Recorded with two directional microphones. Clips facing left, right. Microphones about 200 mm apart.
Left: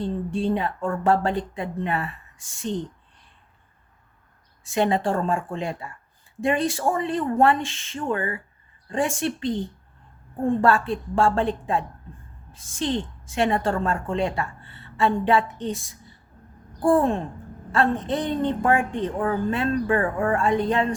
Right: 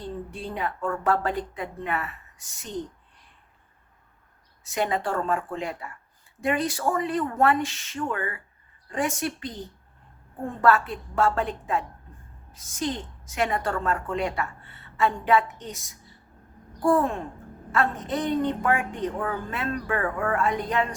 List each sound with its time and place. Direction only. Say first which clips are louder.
0.0 s a woman's voice: left 9 dB; 25° left (ahead or behind)
4.6 s a woman's voice: left 5 dB; 25° left (ahead or behind)
10.6 s a woman's voice: right 4 dB; 30° left (ahead or behind)